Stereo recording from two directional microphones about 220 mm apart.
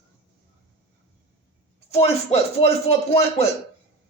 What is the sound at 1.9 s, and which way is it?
Speech, 30° left (ahead or behind).